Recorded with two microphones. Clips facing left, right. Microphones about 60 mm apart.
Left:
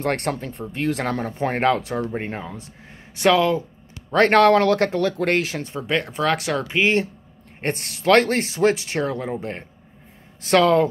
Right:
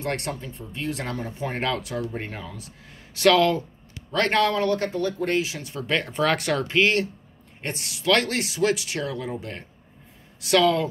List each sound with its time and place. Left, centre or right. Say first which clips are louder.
0.0 s speech: left 5 dB; left
1.6 s speech: left 7 dB; left
3.3 s speech: left 1 dB; centre
4.3 s speech: left 7 dB; left
5.9 s speech: left 1 dB; centre
6.8 s speech: left 2 dB; left
7.6 s speech: left 5 dB; left